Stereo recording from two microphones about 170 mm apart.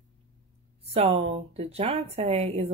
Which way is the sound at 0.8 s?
35° right (ahead or behind).